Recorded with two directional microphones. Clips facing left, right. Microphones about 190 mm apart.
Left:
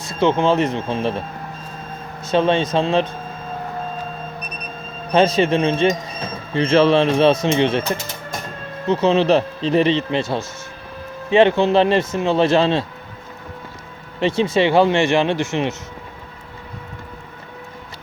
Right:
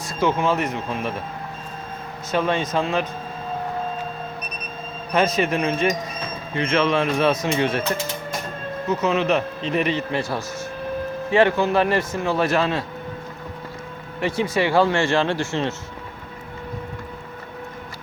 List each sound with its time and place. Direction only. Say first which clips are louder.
0.0 s speech: left 4 dB; 25° left (ahead or behind)
2.3 s speech: left 5 dB; 25° left (ahead or behind)
5.1 s speech: left 5 dB; 30° left (ahead or behind)
8.9 s speech: left 5 dB; 30° left (ahead or behind)
14.2 s speech: left 5 dB; 25° left (ahead or behind)